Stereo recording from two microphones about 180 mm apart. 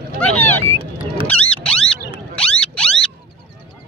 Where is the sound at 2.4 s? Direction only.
5° left (ahead or behind).